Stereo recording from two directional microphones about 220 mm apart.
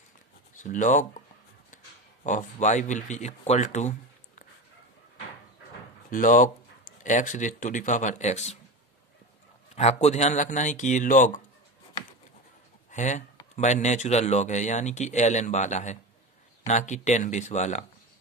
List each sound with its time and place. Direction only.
0.6 s speech: 35° left (ahead or behind)
2.2 s speech: 35° left (ahead or behind)
6.0 s speech: 35° left (ahead or behind)
9.8 s speech: 30° left (ahead or behind)
12.9 s speech: 35° left (ahead or behind)